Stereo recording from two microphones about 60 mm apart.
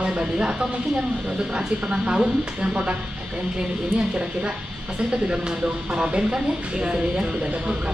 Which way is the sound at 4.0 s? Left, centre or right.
Centre.